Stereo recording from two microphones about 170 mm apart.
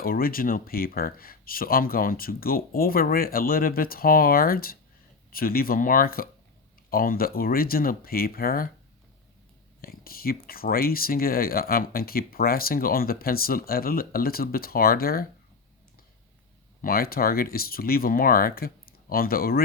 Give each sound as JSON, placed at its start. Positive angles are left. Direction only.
{"t": 0.0, "sound": "speech", "side_deg": 60}
{"t": 9.8, "sound": "speech", "side_deg": 60}
{"t": 16.8, "sound": "speech", "side_deg": 60}